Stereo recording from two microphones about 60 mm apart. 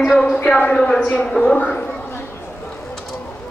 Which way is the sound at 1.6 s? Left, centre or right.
Left.